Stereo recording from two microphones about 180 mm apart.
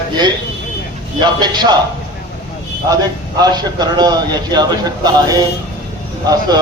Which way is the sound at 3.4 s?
20° right (ahead or behind).